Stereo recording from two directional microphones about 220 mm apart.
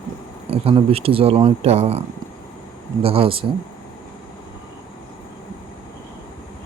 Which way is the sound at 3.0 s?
25° right (ahead or behind).